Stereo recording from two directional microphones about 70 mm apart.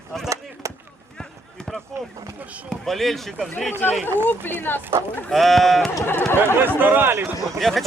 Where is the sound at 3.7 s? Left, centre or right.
Left.